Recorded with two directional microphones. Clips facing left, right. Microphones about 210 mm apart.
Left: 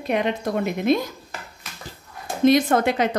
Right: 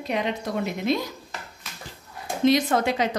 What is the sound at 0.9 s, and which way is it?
Dishes, 50° left (ahead or behind).